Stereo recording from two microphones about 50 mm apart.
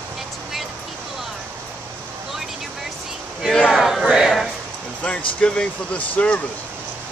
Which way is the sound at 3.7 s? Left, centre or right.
Centre.